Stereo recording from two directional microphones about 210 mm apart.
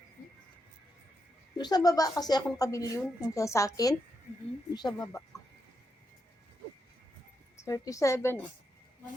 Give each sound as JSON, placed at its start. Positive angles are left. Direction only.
{"t": 1.5, "sound": "a woman's voice", "side_deg": 20}
{"t": 7.6, "sound": "a woman's voice", "side_deg": 15}